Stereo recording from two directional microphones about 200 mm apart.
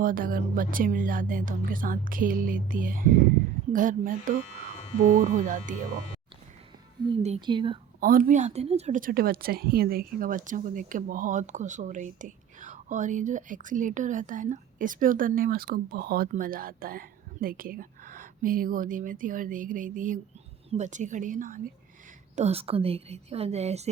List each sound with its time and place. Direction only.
0.0 s a woman's voice: 45° right (ahead or behind)
7.2 s speech: 30° right (ahead or behind)
8.0 s a woman's voice: 45° right (ahead or behind)
22.4 s a woman's voice: 30° right (ahead or behind)